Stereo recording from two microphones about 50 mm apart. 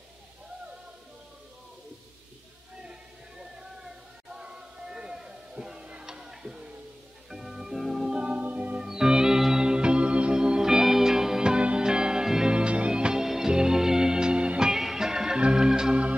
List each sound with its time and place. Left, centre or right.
2.8 s music: centre
4.5 s a sound: centre
7.2 s music: centre
8.2 s music: right
8.8 s organ: centre
11.6 s music: centre
14.7 s music: centre